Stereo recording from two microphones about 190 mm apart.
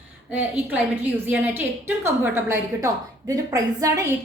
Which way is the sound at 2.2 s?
15° right (ahead or behind).